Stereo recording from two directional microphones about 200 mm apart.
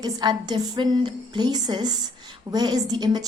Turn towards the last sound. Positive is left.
turn(degrees=-20)  # may be behind; listen again after turning